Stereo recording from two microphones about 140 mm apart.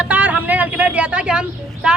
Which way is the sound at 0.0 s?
10° right (ahead or behind).